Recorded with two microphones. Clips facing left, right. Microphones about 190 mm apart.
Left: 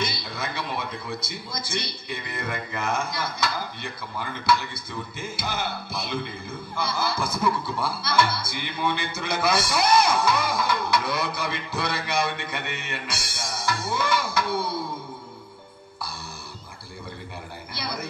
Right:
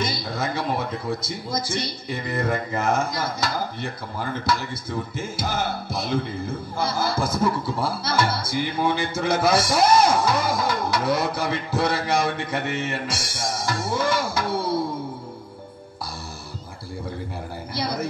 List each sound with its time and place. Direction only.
0.0 s a man's voice: 45° right (ahead or behind)
13.4 s music: 40° right (ahead or behind)
17.7 s speech: 40° right (ahead or behind)